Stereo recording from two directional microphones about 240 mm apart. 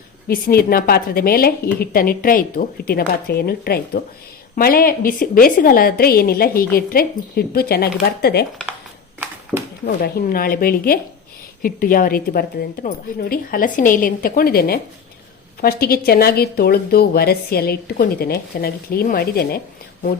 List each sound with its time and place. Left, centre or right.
0.3 s a woman's voice: left
9.8 s a woman's voice: left